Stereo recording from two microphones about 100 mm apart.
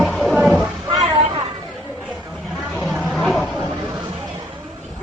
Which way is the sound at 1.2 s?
55° right (ahead or behind).